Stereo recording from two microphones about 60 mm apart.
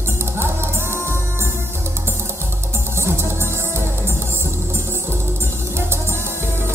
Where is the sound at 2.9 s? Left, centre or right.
Right.